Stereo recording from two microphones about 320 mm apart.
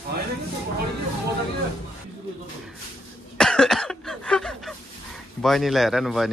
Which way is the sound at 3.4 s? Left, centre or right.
Centre.